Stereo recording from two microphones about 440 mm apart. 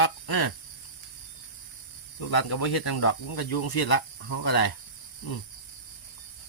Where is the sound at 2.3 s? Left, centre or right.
Left.